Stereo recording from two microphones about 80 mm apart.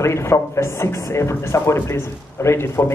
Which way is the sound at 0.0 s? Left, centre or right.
Left.